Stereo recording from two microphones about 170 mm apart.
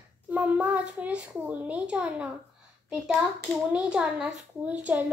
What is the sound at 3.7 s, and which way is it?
A child's voice, 5° right (ahead or behind).